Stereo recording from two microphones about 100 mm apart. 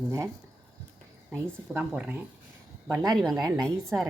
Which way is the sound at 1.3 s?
20° right (ahead or behind).